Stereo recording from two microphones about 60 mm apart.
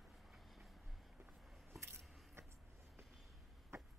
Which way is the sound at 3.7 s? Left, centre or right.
Right.